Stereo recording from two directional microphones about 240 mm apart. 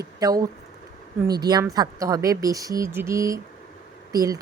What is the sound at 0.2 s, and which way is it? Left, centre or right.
Speech, centre.